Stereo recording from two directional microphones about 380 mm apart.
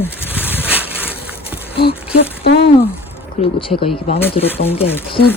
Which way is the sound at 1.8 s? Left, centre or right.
Left.